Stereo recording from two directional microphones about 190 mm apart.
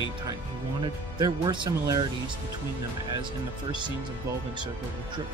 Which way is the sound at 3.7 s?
25° right (ahead or behind).